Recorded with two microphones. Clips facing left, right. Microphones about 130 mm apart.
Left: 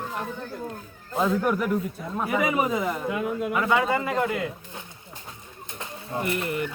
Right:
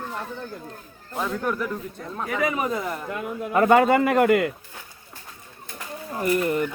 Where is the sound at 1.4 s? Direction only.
15° left (ahead or behind).